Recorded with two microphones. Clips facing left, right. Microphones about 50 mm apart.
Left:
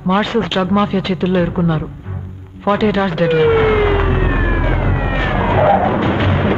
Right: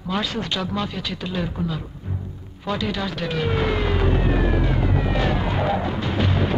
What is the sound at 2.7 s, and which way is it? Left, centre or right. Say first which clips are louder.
Police car: left 11 dB; left.